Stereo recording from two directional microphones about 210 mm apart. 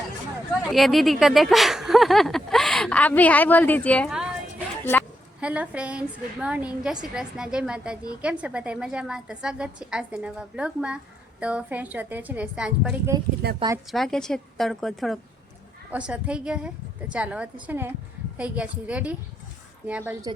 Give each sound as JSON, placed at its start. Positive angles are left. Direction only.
{"t": 0.7, "sound": "a woman's voice", "side_deg": 0}
{"t": 5.4, "sound": "a woman's voice", "side_deg": -5}
{"t": 13.4, "sound": "a woman's voice", "side_deg": -50}
{"t": 13.9, "sound": "a woman's voice", "side_deg": 0}